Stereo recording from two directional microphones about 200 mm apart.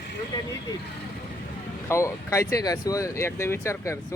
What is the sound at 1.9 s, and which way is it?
Speech, 15° left (ahead or behind).